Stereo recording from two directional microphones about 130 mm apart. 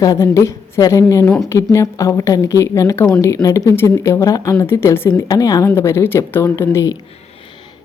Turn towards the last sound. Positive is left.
turn(degrees=20)  # may be behind; listen again after turning